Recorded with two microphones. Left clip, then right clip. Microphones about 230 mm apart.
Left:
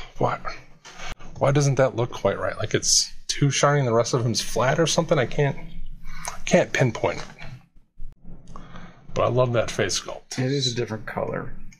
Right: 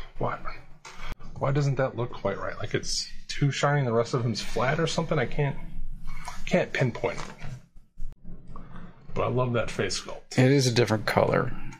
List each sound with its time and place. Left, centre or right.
0.0 s a sound: left
1.4 s speech: left
9.1 s speech: left
10.3 s speech: right